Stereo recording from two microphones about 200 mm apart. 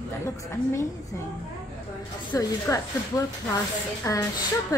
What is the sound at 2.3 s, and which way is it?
Speech, 15° left (ahead or behind).